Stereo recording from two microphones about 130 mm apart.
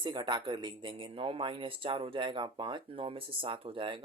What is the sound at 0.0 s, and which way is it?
Speech, 35° right (ahead or behind).